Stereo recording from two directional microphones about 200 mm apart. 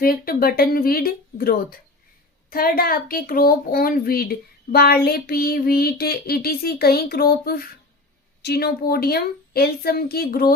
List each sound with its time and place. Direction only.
0.0 s speech: 45° left (ahead or behind)